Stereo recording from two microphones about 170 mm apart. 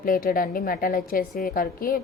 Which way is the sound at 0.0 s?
55° left (ahead or behind).